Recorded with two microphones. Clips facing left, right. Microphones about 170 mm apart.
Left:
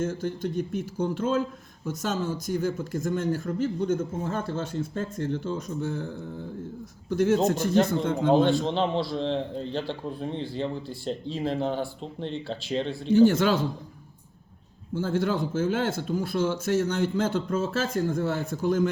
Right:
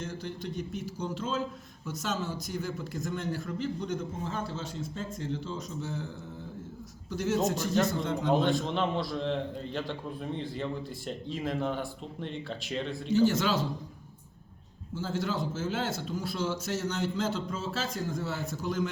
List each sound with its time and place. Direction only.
0.0 s speech: 45° left (ahead or behind)
7.1 s a man's voice: 55° left (ahead or behind)
8.3 s a man's voice: 30° left (ahead or behind)
13.1 s a man's voice: 55° left (ahead or behind)
14.9 s speech: 55° left (ahead or behind)